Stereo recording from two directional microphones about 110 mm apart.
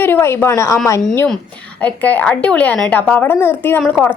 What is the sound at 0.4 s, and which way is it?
Speech, 25° left (ahead or behind).